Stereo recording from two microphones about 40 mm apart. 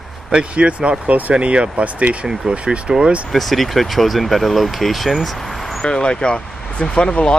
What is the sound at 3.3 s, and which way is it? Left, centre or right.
Speech, centre.